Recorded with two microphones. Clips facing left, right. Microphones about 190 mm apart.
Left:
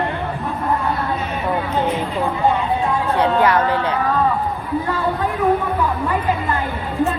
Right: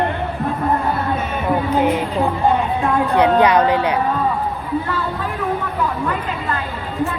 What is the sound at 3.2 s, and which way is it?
Speech, 20° right (ahead or behind).